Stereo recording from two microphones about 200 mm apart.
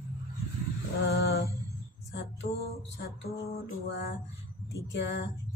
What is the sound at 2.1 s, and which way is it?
Speech, 55° left (ahead or behind).